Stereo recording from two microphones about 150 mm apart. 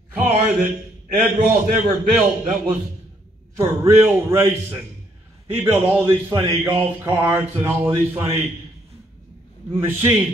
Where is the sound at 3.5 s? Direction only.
20° right (ahead or behind).